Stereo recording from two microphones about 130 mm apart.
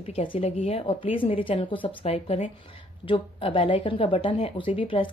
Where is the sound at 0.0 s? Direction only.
50° left (ahead or behind).